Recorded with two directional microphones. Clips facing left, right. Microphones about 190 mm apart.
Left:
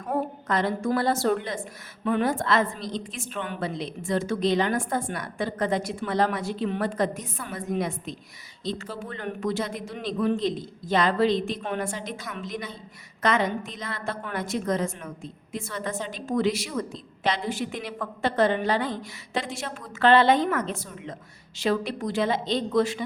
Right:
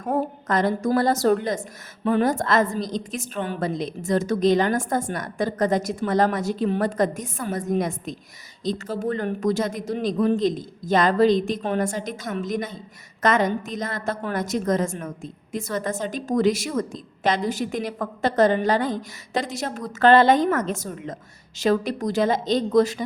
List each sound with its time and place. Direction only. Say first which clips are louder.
0.0 s a woman's voice: right 4 dB; 45° right (ahead or behind)